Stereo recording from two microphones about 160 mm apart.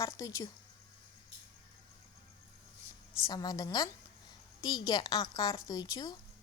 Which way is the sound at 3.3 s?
25° left (ahead or behind).